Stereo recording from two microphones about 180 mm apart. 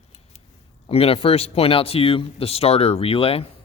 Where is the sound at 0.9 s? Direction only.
30° left (ahead or behind).